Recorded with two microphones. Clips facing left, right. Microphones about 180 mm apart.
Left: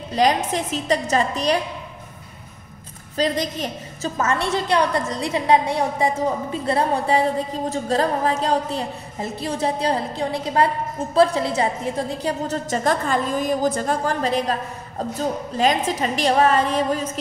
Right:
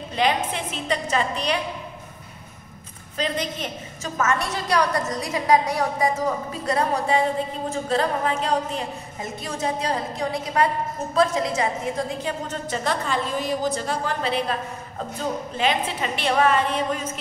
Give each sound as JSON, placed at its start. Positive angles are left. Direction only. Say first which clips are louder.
{"t": 0.1, "sound": "a woman's voice", "louder": "left 4 dB", "side_deg": 40}
{"t": 3.2, "sound": "a woman's voice", "louder": "left 4 dB", "side_deg": 40}